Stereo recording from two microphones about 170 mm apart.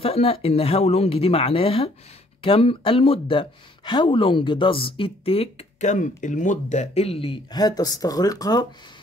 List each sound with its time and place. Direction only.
0.0 s speech: 35° left (ahead or behind)